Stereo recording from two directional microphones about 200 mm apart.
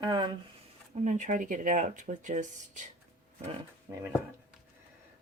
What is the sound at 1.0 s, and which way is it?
Speech, 40° right (ahead or behind).